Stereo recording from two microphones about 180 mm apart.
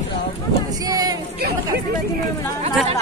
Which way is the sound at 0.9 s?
20° right (ahead or behind).